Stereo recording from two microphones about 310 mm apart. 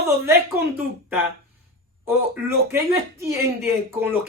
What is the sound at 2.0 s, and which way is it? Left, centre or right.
Speech, centre.